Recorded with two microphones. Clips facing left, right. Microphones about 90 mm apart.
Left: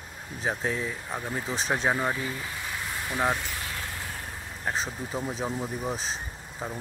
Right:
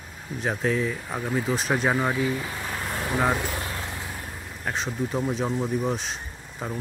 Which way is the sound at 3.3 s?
55° right (ahead or behind).